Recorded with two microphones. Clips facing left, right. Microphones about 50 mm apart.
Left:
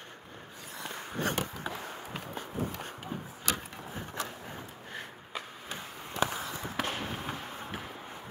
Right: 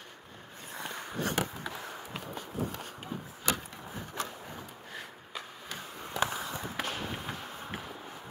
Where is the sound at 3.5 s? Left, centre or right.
Left.